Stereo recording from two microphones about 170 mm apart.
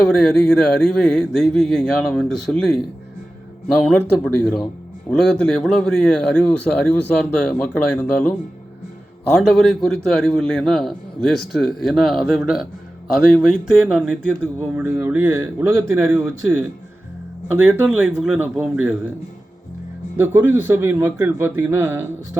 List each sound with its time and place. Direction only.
0.1 s a man's voice: 5° left (ahead or behind)
4.2 s a man's voice: 5° left (ahead or behind)
9.3 s a man's voice: centre (ahead or behind)
20.1 s a man's voice: 10° right (ahead or behind)